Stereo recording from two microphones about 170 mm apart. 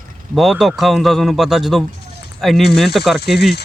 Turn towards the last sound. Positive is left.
turn(degrees=0)  # may be behind; listen again after turning